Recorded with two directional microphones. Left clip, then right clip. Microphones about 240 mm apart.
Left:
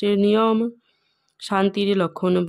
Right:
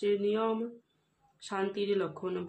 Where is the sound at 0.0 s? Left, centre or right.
Left.